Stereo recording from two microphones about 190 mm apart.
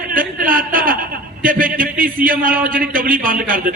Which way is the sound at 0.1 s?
45° right (ahead or behind).